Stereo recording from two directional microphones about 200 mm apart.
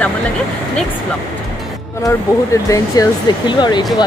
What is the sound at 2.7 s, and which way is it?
Speech, 20° left (ahead or behind).